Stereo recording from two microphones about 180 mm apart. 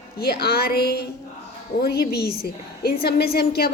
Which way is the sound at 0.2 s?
60° left (ahead or behind).